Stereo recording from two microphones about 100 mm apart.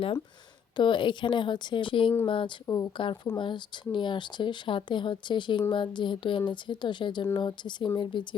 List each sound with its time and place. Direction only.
0.8 s speech: 55° left (ahead or behind)
2.6 s a woman's voice: 35° left (ahead or behind)
3.3 s speech: 50° left (ahead or behind)